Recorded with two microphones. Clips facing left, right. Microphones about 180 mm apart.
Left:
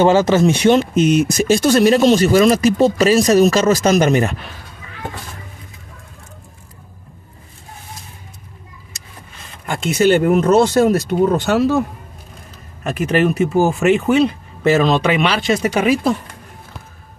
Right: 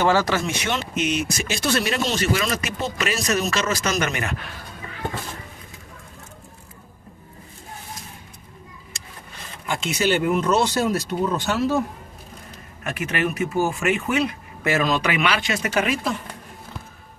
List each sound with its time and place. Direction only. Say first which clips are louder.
0.0 s speech: left 8 dB; 20° left (ahead or behind)
0.7 s speech: left 11 dB; 45° left (ahead or behind)
9.7 s speech: left 8 dB; 50° left (ahead or behind); by 11.8 s 75° left (ahead or behind)
12.8 s speech: left 9 dB; 35° left (ahead or behind)